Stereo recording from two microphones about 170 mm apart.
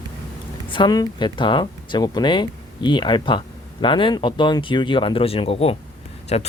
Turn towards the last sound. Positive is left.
turn(degrees=40)  # may be behind; listen again after turning